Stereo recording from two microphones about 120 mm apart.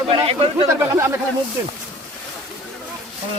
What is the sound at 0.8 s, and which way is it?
Speech, 20° right (ahead or behind).